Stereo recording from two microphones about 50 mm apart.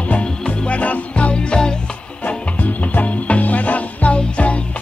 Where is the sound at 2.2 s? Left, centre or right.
Left.